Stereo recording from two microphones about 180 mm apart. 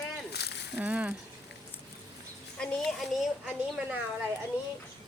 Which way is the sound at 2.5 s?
5° left (ahead or behind).